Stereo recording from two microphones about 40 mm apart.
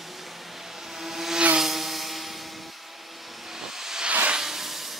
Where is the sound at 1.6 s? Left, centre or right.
Centre.